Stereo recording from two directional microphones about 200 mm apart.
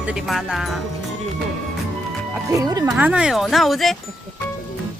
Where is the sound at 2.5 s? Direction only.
20° right (ahead or behind).